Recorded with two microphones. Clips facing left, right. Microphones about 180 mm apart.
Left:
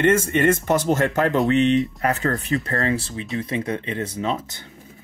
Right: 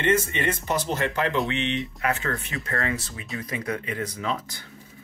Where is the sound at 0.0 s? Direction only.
45° left (ahead or behind); by 4.6 s 25° left (ahead or behind).